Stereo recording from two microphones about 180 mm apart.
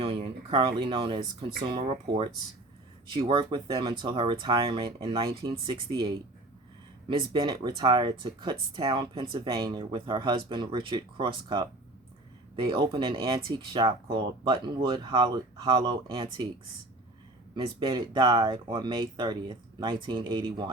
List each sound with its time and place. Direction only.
0.0 s speech: 30° right (ahead or behind)
7.1 s speech: 25° right (ahead or behind)
17.7 s speech: 25° right (ahead or behind)